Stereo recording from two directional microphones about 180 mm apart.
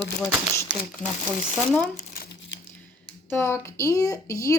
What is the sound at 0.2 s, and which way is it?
Speech, 10° left (ahead or behind).